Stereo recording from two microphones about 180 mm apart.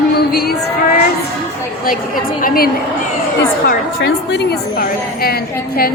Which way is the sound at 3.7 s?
70° left (ahead or behind).